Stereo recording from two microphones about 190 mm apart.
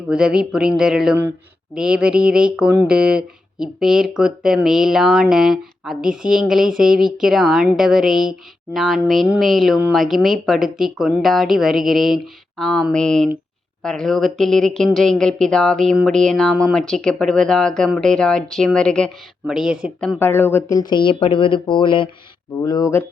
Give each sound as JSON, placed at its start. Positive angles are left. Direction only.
{"t": 0.1, "sound": "speech", "side_deg": -5}
{"t": 20.1, "sound": "speech", "side_deg": 10}